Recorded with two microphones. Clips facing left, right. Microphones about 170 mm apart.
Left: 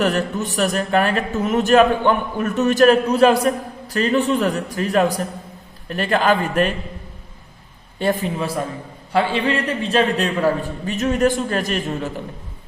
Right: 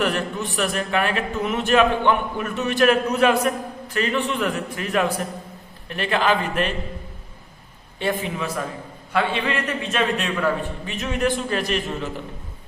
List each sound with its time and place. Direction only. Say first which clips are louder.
0.0 s a man's voice: left 4 dB; 40° left (ahead or behind)
7.9 s speech: left 4 dB; 40° left (ahead or behind)